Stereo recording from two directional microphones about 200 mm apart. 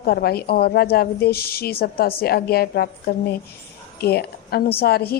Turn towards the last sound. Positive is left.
turn(degrees=50)  # may be behind; listen again after turning